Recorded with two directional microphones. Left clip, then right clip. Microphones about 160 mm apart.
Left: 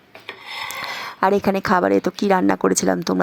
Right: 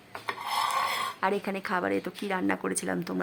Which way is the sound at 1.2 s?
45° left (ahead or behind).